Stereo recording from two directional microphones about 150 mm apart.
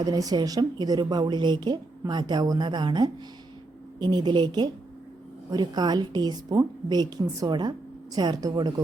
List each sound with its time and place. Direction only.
0.0 s a woman's voice: 25° right (ahead or behind)